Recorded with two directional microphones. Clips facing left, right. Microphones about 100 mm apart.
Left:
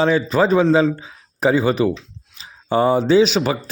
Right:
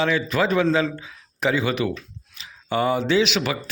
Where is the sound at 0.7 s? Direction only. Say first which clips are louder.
Left 6 dB; 20° left (ahead or behind).